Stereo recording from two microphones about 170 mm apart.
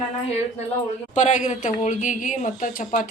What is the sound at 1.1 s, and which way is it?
Speech, 45° left (ahead or behind).